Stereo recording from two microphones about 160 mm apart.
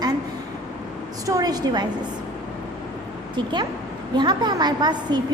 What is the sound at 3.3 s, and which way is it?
A woman's voice, 30° right (ahead or behind).